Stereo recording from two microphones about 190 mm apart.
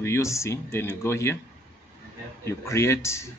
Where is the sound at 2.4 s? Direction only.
15° left (ahead or behind).